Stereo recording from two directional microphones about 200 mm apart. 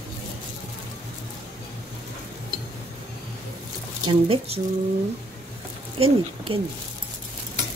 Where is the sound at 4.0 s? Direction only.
25° right (ahead or behind).